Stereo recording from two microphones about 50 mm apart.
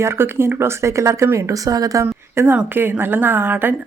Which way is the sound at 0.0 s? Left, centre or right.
Right.